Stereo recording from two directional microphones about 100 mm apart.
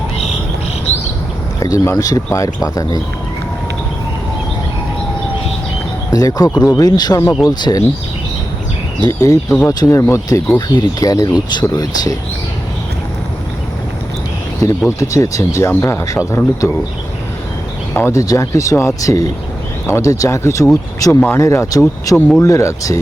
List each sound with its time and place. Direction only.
1.5 s speech: 35° left (ahead or behind)
6.1 s speech: 40° left (ahead or behind)
9.0 s speech: 35° left (ahead or behind)
14.6 s a man's voice: 30° left (ahead or behind)
17.9 s a man's voice: 30° left (ahead or behind)